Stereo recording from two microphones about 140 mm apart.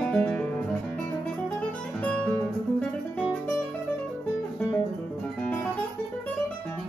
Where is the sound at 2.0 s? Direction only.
10° left (ahead or behind).